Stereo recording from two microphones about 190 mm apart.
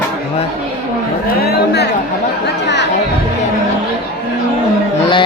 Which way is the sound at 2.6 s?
65° left (ahead or behind).